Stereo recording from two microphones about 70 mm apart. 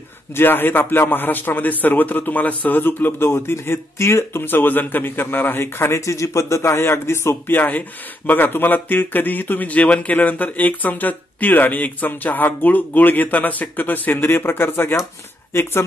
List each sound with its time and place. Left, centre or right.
0.4 s a man's voice: left